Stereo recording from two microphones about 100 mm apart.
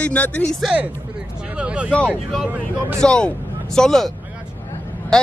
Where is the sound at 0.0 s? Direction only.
15° left (ahead or behind).